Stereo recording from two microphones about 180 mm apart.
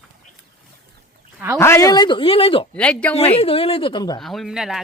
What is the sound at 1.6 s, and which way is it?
Speech, 15° left (ahead or behind).